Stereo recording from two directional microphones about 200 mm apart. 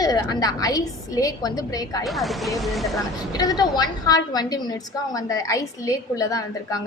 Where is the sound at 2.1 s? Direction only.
Centre (ahead or behind).